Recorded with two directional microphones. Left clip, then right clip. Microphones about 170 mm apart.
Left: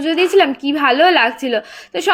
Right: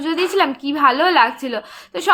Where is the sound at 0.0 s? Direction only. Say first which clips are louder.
Left 4 dB; 15° left (ahead or behind).